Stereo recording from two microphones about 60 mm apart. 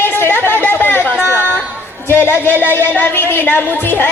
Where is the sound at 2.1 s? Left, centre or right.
Left.